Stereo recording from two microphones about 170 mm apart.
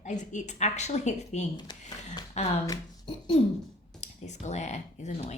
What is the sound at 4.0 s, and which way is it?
Speech, 45° left (ahead or behind).